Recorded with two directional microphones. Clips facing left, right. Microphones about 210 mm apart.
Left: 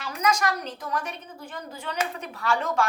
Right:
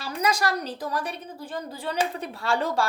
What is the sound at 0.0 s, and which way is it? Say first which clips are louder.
A woman's voice: even; 35° right (ahead or behind).